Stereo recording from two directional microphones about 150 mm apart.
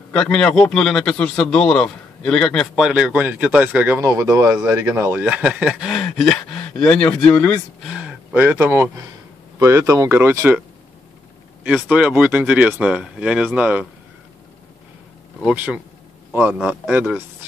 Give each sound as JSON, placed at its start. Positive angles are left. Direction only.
{"t": 0.1, "sound": "a man's voice", "side_deg": 5}
{"t": 5.2, "sound": "a man's voice", "side_deg": -10}
{"t": 7.8, "sound": "speech", "side_deg": -5}
{"t": 11.6, "sound": "speech", "side_deg": -10}
{"t": 15.4, "sound": "speech", "side_deg": -10}